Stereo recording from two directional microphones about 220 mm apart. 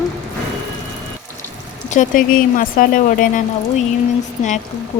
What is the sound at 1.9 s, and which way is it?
Speech, 35° left (ahead or behind).